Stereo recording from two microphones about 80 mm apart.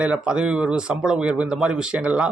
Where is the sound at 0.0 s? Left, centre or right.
Centre.